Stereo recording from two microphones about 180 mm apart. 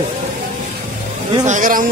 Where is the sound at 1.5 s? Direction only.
50° right (ahead or behind).